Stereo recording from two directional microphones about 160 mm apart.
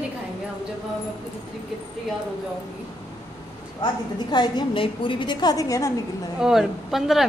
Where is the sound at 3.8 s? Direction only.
25° left (ahead or behind).